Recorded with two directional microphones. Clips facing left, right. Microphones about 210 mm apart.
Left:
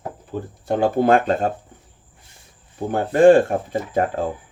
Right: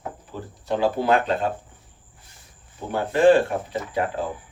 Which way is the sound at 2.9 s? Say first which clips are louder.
Left 4 dB; 45° left (ahead or behind).